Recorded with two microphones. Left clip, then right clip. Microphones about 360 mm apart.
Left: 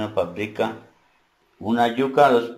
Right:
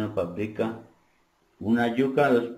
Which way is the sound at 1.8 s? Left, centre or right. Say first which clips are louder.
Left 7 dB; left.